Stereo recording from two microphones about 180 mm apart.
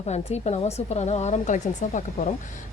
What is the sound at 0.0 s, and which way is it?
Speech, 40° left (ahead or behind).